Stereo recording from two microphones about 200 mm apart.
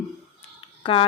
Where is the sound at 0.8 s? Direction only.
25° left (ahead or behind).